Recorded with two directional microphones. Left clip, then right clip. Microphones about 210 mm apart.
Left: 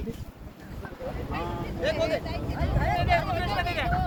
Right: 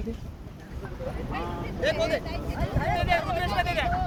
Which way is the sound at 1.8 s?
40° right (ahead or behind).